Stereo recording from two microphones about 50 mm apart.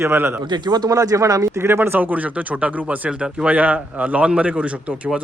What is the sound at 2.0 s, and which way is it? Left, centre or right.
Speech, right.